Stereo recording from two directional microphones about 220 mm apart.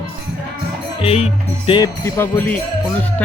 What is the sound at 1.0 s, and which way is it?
Speech, 25° left (ahead or behind).